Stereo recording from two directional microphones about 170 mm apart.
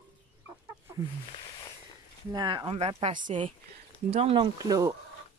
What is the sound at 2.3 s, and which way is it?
Speech, 25° right (ahead or behind).